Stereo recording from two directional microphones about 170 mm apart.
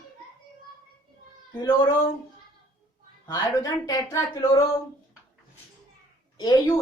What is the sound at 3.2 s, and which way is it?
Speech, 20° left (ahead or behind).